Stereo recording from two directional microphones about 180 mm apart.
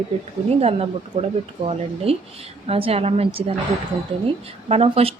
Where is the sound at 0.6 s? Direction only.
35° right (ahead or behind).